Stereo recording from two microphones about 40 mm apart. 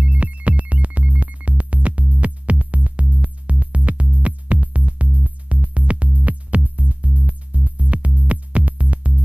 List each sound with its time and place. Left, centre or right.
0.0 s music: right